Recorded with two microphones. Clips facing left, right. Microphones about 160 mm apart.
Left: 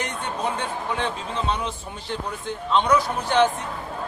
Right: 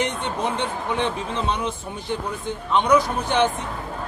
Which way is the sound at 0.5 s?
20° right (ahead or behind).